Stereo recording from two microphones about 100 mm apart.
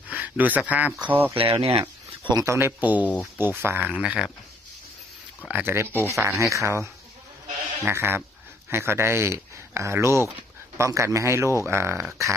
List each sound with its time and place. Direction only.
0.1 s speech: 15° right (ahead or behind)
1.4 s speech: 65° right (ahead or behind)
2.3 s speech: 30° right (ahead or behind); by 4.3 s 10° right (ahead or behind)
5.5 s speech: 20° right (ahead or behind)